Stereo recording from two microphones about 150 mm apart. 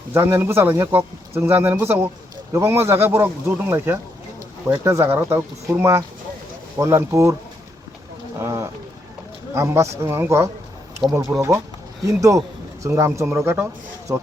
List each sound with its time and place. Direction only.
0.1 s speech: 15° right (ahead or behind)
8.4 s speech: 20° right (ahead or behind)